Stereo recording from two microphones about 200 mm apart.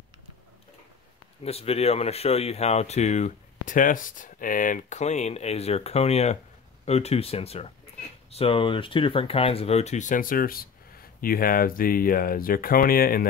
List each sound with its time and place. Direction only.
1.4 s speech: 30° left (ahead or behind); by 13.3 s 45° left (ahead or behind)